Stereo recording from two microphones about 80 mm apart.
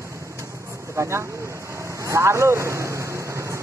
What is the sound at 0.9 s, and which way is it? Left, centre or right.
Speech, right.